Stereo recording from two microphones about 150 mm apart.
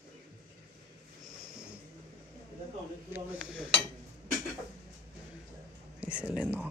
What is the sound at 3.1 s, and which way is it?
Cutlery, 5° right (ahead or behind).